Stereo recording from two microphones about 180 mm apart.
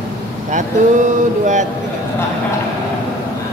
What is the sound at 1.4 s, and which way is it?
Speech, 45° right (ahead or behind).